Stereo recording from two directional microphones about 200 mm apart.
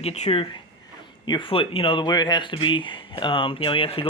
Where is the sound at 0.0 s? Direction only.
30° left (ahead or behind).